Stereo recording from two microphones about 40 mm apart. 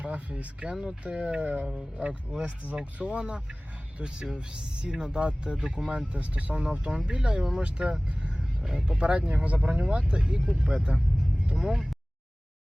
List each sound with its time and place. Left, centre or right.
0.0 s speech: right
1.4 s a sound: right
2.0 s speech: right
6.1 s speech: right
8.0 s vehicle: right
8.6 s speech: right